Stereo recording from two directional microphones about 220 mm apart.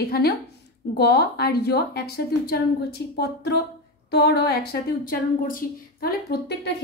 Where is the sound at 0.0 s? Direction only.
45° left (ahead or behind).